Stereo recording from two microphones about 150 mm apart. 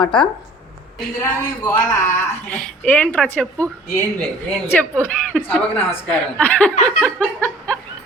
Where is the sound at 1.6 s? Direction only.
25° left (ahead or behind); by 3.7 s 10° left (ahead or behind).